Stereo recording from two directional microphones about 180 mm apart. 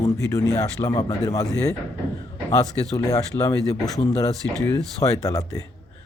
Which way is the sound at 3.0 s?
20° left (ahead or behind).